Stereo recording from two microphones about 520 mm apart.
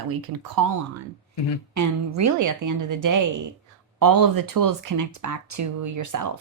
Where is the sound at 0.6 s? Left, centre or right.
Right.